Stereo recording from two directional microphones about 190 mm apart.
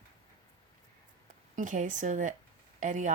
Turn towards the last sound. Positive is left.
turn(degrees=-40)  # may be behind; listen again after turning